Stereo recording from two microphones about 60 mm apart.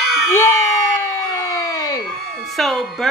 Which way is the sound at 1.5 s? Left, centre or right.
Left.